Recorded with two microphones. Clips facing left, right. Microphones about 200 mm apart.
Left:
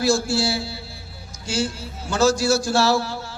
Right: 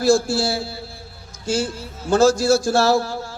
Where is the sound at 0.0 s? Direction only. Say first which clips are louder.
Right 3 dB; 55° right (ahead or behind).